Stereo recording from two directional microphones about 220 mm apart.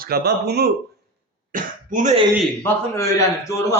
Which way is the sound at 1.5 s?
35° right (ahead or behind).